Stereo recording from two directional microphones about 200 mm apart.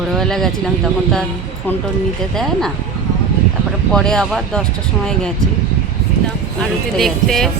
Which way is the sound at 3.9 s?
5° left (ahead or behind).